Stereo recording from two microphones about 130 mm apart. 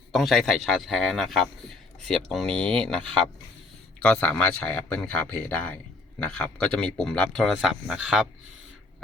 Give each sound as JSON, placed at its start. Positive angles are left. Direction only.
{"t": 0.1, "sound": "a man's voice", "side_deg": 0}